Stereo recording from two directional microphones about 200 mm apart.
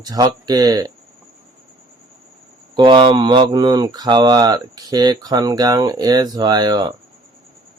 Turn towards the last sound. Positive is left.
turn(degrees=-20)  # may be behind; listen again after turning